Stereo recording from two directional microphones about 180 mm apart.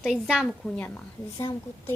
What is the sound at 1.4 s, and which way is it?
Speech, 20° left (ahead or behind).